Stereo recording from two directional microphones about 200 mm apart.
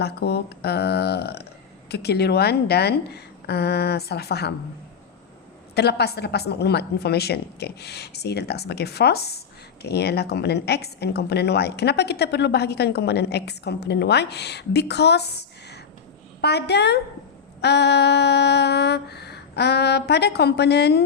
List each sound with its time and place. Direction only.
0.0 s a woman's voice: 55° left (ahead or behind)
5.7 s a woman's voice: 55° left (ahead or behind)